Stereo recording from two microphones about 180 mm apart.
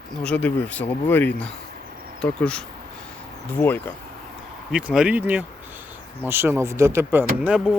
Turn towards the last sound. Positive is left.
turn(degrees=-5)  # may be behind; listen again after turning